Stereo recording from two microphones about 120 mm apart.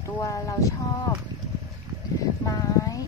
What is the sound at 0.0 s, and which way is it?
Speech, 25° left (ahead or behind).